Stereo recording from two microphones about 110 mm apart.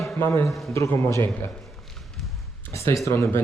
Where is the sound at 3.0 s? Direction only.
25° left (ahead or behind).